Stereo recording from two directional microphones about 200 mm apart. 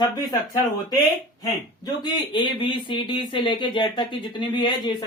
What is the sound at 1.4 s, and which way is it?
Speech, 20° left (ahead or behind).